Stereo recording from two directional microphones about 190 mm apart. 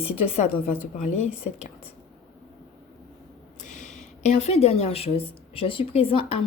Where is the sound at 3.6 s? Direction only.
40° left (ahead or behind).